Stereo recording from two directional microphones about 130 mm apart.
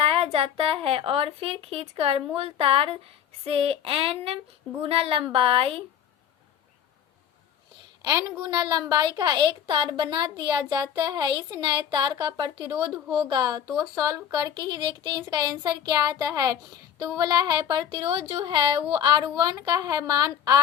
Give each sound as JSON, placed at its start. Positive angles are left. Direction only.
{"t": 0.0, "sound": "speech", "side_deg": -45}
{"t": 8.0, "sound": "speech", "side_deg": -35}